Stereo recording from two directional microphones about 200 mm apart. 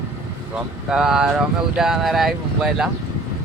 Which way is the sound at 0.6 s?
Centre (ahead or behind).